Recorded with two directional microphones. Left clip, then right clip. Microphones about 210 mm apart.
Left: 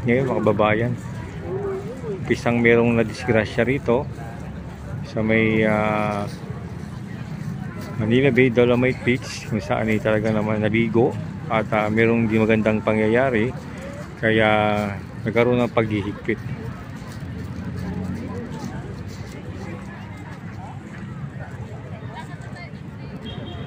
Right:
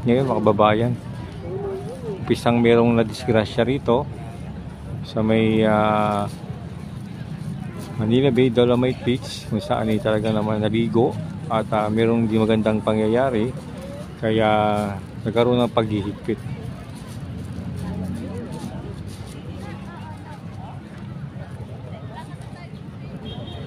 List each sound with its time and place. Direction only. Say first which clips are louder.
0.0 s speech: right 1 dB; 15° right (ahead or behind)
2.2 s speech: even; 15° right (ahead or behind)
5.1 s speech: even; 15° right (ahead or behind)
8.0 s speech: left 1 dB; 10° right (ahead or behind)